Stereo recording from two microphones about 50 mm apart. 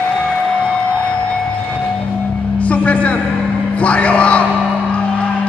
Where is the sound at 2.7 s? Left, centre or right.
Left.